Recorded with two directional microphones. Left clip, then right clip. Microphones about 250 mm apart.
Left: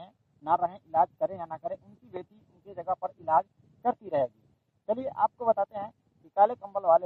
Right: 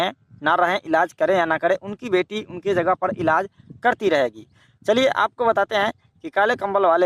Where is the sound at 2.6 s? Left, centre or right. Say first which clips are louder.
Right 13 dB; right.